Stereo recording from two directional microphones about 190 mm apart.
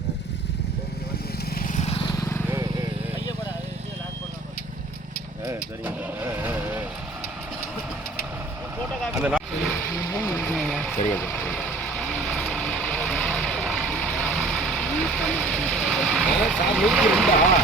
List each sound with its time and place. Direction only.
1.5 s vehicle: 40° left (ahead or behind)
2.1 s vehicle: 15° left (ahead or behind)
5.5 s vehicle: 10° right (ahead or behind)
9.0 s a sound: 5° right (ahead or behind)
9.9 s vehicle: 10° left (ahead or behind)